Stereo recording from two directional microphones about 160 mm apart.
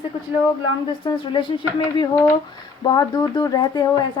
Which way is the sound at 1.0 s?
30° left (ahead or behind).